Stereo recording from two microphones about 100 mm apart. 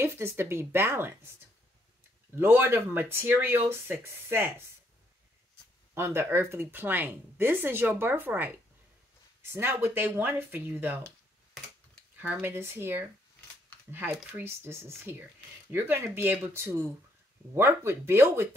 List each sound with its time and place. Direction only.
0.0 s speech: 25° right (ahead or behind)
2.3 s speech: 25° right (ahead or behind)
5.9 s speech: 25° right (ahead or behind)
12.2 s speech: 20° right (ahead or behind)